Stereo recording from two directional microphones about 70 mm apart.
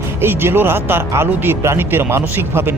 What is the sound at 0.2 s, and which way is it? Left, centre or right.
Speech, right.